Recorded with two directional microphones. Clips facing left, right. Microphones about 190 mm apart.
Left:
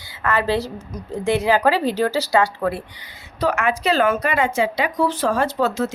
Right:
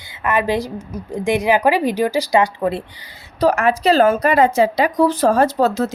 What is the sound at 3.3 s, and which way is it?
Speech, 35° right (ahead or behind).